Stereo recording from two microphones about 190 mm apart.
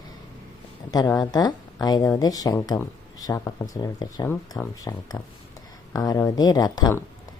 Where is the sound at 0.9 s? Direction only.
20° left (ahead or behind).